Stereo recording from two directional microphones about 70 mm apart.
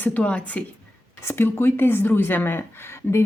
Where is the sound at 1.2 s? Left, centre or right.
Left.